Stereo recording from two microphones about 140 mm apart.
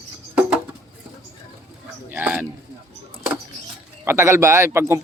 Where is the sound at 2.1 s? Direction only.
10° right (ahead or behind).